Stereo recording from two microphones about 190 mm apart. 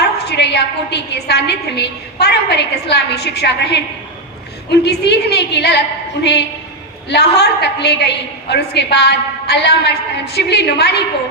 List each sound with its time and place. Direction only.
0.0 s a woman's voice: 60° left (ahead or behind)
7.1 s a woman's voice: 60° left (ahead or behind)